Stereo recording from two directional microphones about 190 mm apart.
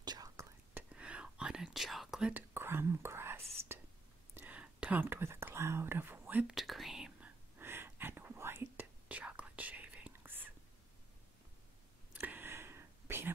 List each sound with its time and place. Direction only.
0.0 s whispering: 20° right (ahead or behind)
0.9 s whispering: 5° right (ahead or behind)
12.1 s whispering: 10° right (ahead or behind)